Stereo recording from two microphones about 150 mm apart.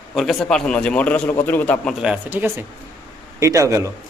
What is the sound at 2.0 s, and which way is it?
Speech, 10° right (ahead or behind).